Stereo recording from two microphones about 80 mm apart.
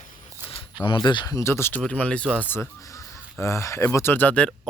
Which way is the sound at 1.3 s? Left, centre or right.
Left.